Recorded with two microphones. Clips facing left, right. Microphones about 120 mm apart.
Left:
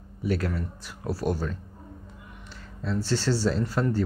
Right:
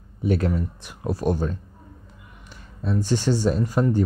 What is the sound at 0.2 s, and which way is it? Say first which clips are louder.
Speech: right 5 dB; 20° right (ahead or behind).